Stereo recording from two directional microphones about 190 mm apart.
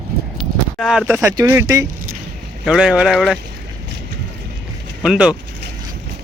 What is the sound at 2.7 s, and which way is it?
Speech, 5° right (ahead or behind).